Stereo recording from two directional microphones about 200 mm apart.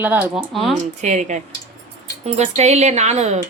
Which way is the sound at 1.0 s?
35° right (ahead or behind).